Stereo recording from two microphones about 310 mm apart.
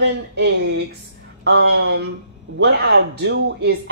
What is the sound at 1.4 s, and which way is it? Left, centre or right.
Speech, right.